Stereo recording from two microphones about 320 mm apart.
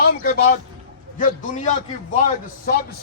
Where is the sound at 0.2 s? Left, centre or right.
Left.